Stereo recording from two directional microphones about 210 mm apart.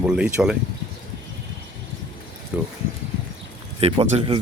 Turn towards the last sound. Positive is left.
turn(degrees=-25)  # may be behind; listen again after turning